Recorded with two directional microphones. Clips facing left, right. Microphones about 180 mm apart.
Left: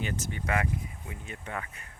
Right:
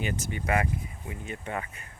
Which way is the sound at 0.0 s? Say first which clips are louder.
Right 2 dB; 10° right (ahead or behind).